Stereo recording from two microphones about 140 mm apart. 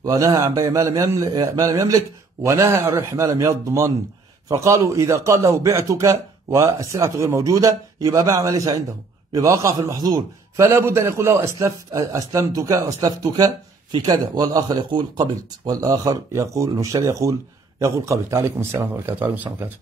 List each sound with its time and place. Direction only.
0.0 s speech: 25° right (ahead or behind)